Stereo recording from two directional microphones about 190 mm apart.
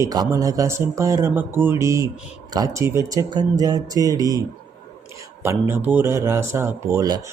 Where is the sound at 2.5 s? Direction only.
15° right (ahead or behind).